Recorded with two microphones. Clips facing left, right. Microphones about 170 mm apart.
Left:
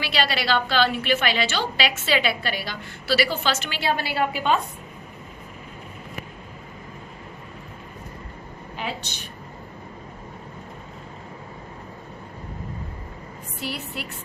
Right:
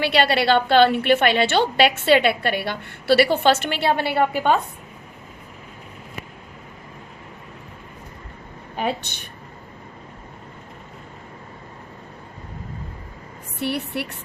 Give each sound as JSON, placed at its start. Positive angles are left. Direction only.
{"t": 0.0, "sound": "a woman's voice", "side_deg": -60}
{"t": 8.7, "sound": "a woman's voice", "side_deg": -55}
{"t": 13.6, "sound": "a woman's voice", "side_deg": -60}